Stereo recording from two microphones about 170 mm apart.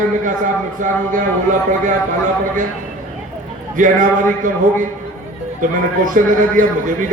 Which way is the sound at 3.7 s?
50° right (ahead or behind).